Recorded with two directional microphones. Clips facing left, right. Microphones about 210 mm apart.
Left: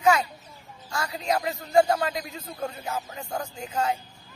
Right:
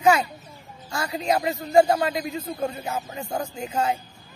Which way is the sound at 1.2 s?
10° right (ahead or behind).